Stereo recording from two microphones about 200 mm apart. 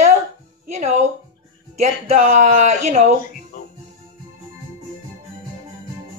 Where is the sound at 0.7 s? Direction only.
35° right (ahead or behind).